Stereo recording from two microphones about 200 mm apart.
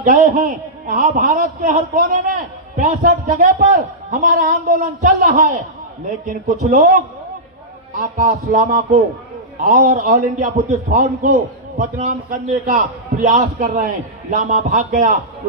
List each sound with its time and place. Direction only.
0.0 s a man's voice: 40° right (ahead or behind)
6.2 s a man's voice: 40° right (ahead or behind)